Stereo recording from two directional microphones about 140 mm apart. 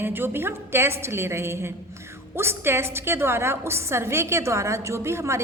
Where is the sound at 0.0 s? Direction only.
15° right (ahead or behind).